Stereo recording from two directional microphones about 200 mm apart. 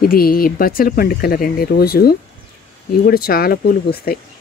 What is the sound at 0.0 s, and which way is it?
Speech, 50° left (ahead or behind).